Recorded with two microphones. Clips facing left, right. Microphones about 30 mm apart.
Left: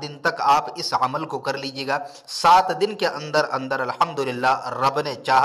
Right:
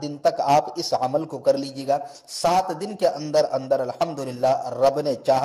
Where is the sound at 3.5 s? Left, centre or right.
Left.